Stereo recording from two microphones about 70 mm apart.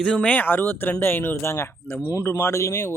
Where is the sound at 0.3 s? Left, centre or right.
Left.